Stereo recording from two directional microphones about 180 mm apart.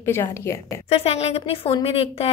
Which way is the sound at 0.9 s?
35° left (ahead or behind).